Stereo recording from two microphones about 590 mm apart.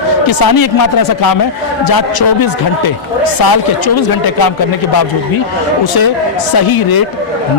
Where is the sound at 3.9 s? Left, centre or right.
Left.